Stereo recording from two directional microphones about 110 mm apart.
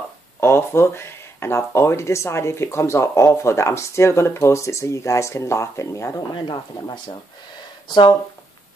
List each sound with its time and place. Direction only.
0.4 s speech: 20° left (ahead or behind)
6.3 s speech: 45° left (ahead or behind)